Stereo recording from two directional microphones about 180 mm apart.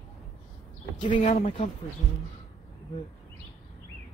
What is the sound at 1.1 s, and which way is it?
Speech, 35° left (ahead or behind).